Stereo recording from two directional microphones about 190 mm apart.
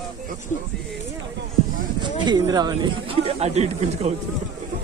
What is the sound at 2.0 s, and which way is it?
Speech, 20° right (ahead or behind).